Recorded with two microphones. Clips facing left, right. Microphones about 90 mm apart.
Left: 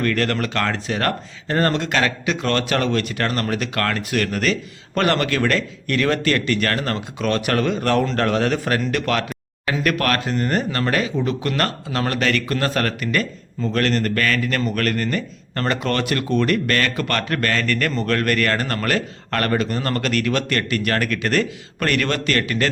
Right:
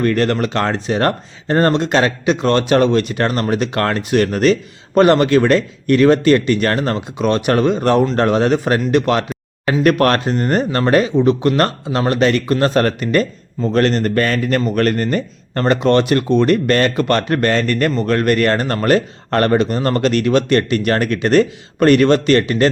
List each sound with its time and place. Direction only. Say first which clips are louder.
0.0 s speech: right 5 dB; 25° right (ahead or behind)